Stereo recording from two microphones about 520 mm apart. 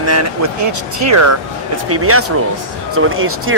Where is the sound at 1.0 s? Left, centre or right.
Right.